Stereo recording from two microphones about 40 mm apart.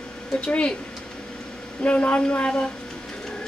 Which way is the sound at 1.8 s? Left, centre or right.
Left.